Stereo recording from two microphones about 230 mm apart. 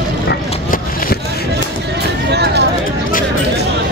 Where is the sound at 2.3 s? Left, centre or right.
Right.